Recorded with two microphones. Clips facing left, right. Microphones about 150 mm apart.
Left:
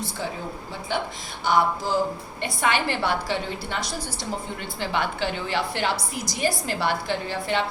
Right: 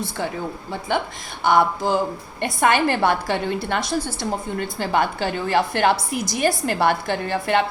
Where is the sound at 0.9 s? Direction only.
60° right (ahead or behind).